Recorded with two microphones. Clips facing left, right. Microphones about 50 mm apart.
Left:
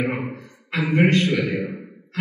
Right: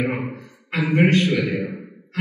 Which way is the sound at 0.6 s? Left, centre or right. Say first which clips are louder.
Right 1 dB; right.